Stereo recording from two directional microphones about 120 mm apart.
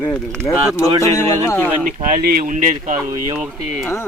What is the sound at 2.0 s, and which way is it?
Speech, 90° right.